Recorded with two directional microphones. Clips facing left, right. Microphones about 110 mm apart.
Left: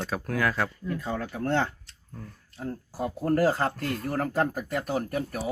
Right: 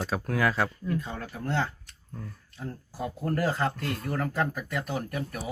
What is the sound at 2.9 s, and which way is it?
Speech, 35° left (ahead or behind).